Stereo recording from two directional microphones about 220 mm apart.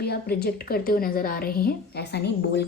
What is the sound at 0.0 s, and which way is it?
A woman's voice, 45° left (ahead or behind).